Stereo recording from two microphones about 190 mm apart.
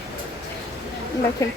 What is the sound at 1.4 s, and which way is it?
Speech, 20° left (ahead or behind).